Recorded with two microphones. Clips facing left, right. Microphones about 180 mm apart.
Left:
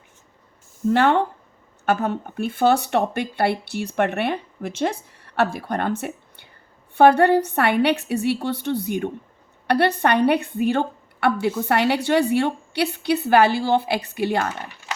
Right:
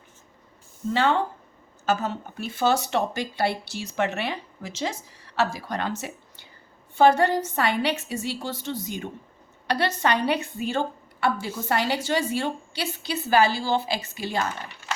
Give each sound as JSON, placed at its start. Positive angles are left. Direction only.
{"t": 0.9, "sound": "a woman's voice", "side_deg": 60}